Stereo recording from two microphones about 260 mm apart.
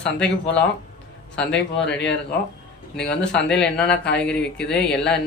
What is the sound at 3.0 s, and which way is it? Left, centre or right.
Speech, centre.